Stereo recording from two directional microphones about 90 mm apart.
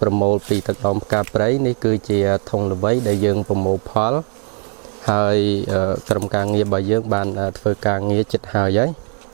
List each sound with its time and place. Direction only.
0.0 s speech: 25° right (ahead or behind)
2.9 s speech: 20° right (ahead or behind)
5.0 s speech: 20° right (ahead or behind)
5.6 s speech: 25° right (ahead or behind)